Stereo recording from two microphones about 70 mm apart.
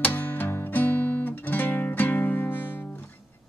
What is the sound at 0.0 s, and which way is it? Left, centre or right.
Music, left.